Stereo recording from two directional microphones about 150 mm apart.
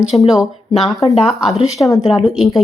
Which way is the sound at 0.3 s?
Centre (ahead or behind).